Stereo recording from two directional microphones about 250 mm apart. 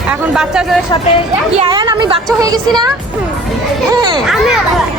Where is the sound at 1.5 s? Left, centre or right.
Centre.